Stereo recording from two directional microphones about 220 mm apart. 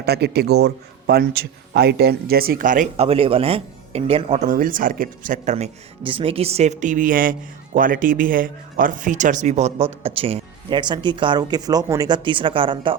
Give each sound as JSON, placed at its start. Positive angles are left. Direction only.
{"t": 0.0, "sound": "a man's voice", "side_deg": -45}